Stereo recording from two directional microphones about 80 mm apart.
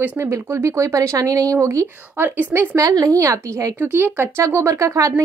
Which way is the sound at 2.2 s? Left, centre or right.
Right.